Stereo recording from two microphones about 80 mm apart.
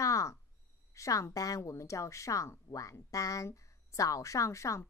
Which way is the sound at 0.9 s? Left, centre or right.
Left.